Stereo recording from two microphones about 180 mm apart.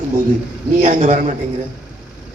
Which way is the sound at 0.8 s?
45° right (ahead or behind).